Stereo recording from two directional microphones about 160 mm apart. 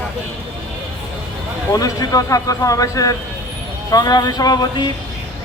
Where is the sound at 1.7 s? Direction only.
25° left (ahead or behind).